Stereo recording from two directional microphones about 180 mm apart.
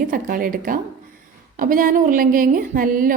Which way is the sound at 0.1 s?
50° right (ahead or behind).